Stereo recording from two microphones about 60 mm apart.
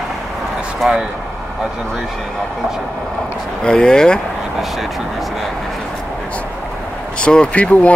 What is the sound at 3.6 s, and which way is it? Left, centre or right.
Speech, centre.